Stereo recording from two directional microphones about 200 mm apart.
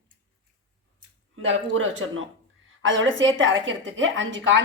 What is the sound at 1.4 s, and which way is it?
A woman's voice, 75° right (ahead or behind).